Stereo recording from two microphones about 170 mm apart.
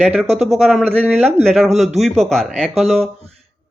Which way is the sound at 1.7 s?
40° right (ahead or behind).